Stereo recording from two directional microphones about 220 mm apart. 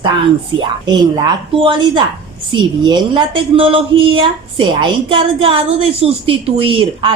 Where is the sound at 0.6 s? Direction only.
20° right (ahead or behind).